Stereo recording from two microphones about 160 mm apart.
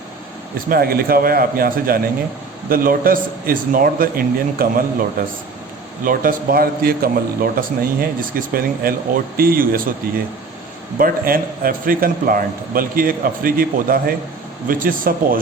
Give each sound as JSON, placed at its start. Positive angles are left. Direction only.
{"t": 0.7, "sound": "a man's voice", "side_deg": -70}
{"t": 10.9, "sound": "a man's voice", "side_deg": -65}